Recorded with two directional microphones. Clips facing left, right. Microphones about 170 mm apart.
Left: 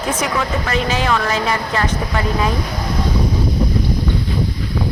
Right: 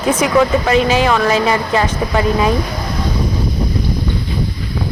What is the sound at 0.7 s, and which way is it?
A woman's voice, 15° right (ahead or behind).